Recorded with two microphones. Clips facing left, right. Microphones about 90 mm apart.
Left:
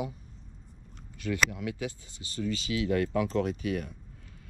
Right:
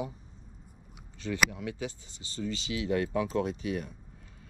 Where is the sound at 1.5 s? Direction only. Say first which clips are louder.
Left 2 dB; 30° right (ahead or behind).